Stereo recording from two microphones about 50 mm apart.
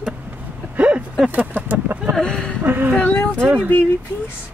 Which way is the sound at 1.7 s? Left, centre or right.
Right.